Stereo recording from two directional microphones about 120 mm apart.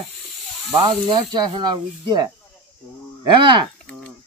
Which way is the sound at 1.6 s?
40° right (ahead or behind).